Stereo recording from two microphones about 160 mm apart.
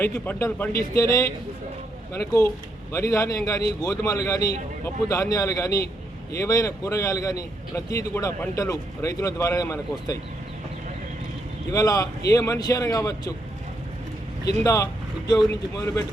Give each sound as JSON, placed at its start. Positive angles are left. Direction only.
{"t": 0.0, "sound": "a man's voice", "side_deg": 15}
{"t": 11.7, "sound": "a man's voice", "side_deg": 20}
{"t": 14.6, "sound": "a man's voice", "side_deg": 20}